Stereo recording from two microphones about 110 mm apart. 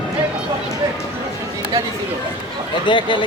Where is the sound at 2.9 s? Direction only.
45° left (ahead or behind).